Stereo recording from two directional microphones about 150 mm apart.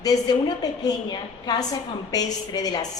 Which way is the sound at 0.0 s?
25° left (ahead or behind).